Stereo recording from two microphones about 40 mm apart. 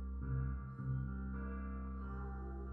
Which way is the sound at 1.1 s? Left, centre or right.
Centre.